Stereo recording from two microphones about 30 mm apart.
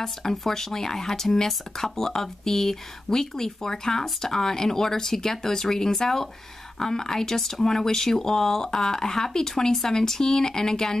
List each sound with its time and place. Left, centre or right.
0.0 s speech: centre